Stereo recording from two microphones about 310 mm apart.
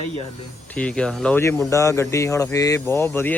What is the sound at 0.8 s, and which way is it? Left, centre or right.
Speech, centre.